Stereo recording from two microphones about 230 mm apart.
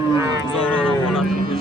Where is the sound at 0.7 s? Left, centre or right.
Centre.